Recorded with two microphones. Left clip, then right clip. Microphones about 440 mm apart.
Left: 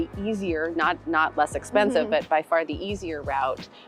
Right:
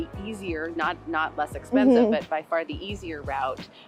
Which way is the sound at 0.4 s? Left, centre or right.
Left.